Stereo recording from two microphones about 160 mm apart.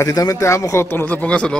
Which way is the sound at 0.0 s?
20° left (ahead or behind).